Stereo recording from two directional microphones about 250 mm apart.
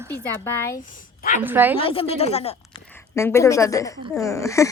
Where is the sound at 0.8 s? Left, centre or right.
Left.